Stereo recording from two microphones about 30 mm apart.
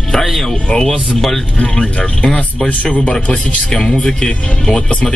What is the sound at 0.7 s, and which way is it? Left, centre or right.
Speech, left.